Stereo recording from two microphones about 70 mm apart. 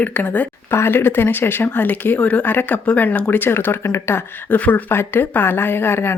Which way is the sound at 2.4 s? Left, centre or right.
Left.